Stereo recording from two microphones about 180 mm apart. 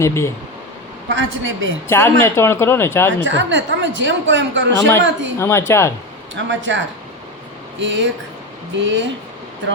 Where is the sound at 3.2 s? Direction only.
90° right.